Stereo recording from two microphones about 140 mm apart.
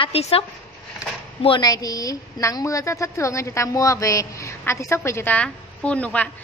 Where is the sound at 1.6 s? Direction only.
25° left (ahead or behind); by 6.2 s 10° left (ahead or behind).